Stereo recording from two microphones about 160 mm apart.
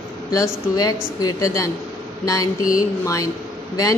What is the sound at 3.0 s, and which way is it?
Speech, 20° left (ahead or behind).